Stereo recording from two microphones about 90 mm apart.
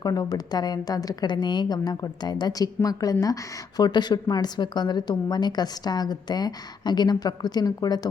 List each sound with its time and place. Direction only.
0.0 s a woman's voice: 45° left (ahead or behind)
3.8 s a woman's voice: 50° left (ahead or behind)